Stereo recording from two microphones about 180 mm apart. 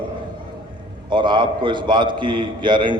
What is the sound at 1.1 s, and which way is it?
A man's voice, 25° right (ahead or behind).